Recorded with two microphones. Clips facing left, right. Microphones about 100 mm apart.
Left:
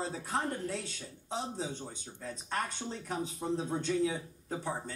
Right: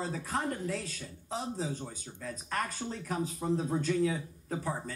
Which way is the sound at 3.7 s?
30° left (ahead or behind).